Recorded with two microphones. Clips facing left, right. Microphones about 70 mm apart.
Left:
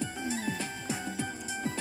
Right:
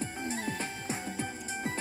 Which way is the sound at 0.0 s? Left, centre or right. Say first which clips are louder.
Left 1 dB; right.